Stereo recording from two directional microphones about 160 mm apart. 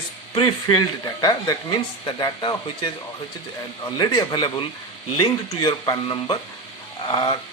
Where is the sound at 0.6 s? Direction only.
25° left (ahead or behind).